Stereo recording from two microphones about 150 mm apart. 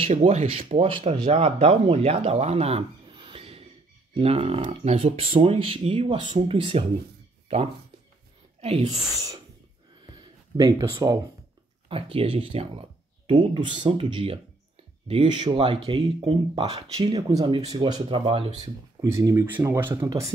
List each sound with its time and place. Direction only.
0.0 s a woman's voice: 45° right (ahead or behind)
10.1 s a sound: 25° right (ahead or behind)
11.9 s speech: 35° right (ahead or behind)
17.3 s speech: 25° right (ahead or behind)
18.9 s speech: 20° right (ahead or behind)